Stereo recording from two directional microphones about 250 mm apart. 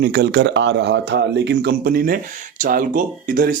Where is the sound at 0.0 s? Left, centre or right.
Right.